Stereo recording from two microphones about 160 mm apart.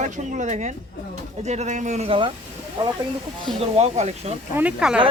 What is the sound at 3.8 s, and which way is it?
Speech, 45° right (ahead or behind).